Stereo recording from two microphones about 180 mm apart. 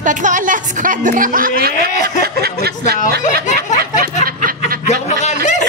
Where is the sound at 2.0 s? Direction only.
60° right (ahead or behind).